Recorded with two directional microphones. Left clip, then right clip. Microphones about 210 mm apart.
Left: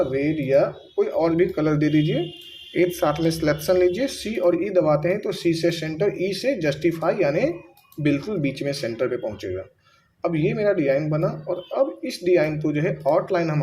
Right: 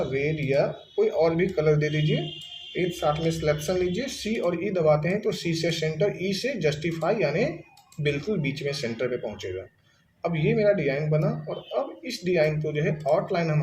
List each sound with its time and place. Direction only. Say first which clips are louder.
0.4 s speech: left 7 dB; 35° left (ahead or behind)